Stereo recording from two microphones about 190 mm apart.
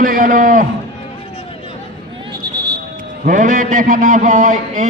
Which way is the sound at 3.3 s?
40° right (ahead or behind).